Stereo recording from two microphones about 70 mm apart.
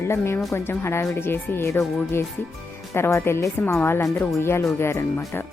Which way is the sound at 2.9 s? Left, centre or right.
Left.